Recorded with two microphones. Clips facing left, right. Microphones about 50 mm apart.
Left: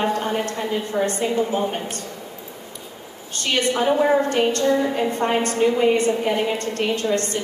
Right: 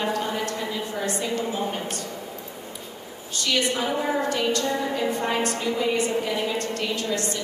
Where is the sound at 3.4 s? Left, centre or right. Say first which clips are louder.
Left 3 dB; left.